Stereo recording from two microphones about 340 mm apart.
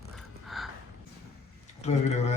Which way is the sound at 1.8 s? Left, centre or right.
Centre.